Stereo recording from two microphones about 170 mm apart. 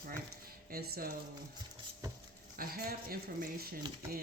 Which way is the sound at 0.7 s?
60° right (ahead or behind).